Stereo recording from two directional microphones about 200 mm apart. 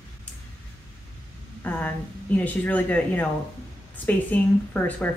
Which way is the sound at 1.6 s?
10° left (ahead or behind).